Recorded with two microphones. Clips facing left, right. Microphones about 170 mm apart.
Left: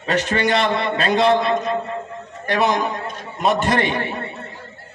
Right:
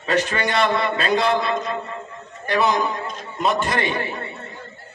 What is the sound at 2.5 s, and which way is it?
A man's voice, 20° left (ahead or behind).